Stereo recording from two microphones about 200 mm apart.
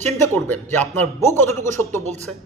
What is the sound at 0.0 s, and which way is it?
Speech, 10° left (ahead or behind).